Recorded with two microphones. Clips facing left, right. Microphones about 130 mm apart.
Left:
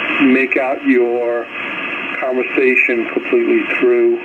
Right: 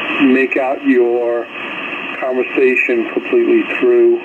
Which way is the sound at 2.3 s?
20° right (ahead or behind).